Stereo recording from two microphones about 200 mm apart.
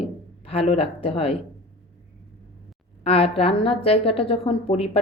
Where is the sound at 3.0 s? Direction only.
30° left (ahead or behind).